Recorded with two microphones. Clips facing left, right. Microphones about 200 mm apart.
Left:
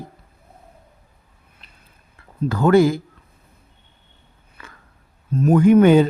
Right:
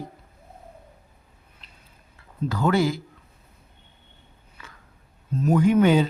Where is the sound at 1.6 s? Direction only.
55° left (ahead or behind).